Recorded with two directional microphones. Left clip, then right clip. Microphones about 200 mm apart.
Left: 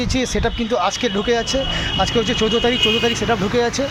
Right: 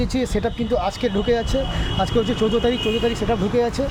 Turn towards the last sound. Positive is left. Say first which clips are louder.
# left 2 dB
turn(degrees=5)  # may be behind; listen again after turning